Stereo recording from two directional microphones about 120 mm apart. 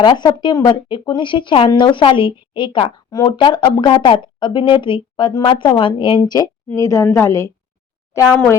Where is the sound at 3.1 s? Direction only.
35° left (ahead or behind).